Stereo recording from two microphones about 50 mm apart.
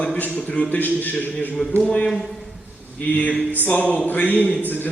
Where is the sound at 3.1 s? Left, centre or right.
Left.